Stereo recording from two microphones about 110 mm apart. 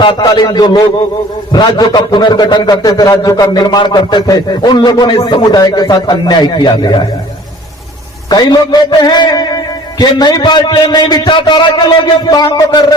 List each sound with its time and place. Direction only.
0.2 s a man's voice: 40° left (ahead or behind)
8.3 s a man's voice: 40° left (ahead or behind)